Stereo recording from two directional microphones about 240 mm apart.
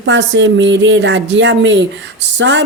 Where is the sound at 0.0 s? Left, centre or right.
Right.